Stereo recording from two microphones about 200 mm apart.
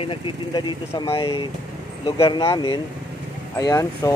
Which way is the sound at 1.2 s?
25° left (ahead or behind).